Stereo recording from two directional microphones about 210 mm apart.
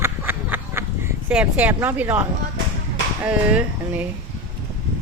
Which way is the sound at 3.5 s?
10° right (ahead or behind).